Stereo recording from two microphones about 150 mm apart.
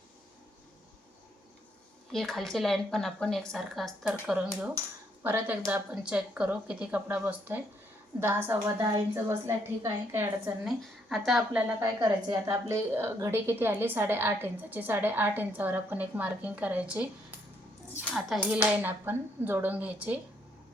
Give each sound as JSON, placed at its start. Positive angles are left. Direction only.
{"t": 2.1, "sound": "speech", "side_deg": 0}
{"t": 5.2, "sound": "a woman's voice", "side_deg": -15}
{"t": 10.6, "sound": "speech", "side_deg": 0}
{"t": 11.8, "sound": "a woman's voice", "side_deg": -20}
{"t": 18.3, "sound": "a woman's voice", "side_deg": -10}